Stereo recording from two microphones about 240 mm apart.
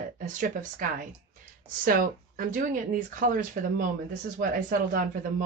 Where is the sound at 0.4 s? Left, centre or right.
Right.